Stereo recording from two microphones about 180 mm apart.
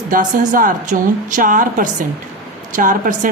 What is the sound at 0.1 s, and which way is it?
A woman's voice, 45° right (ahead or behind).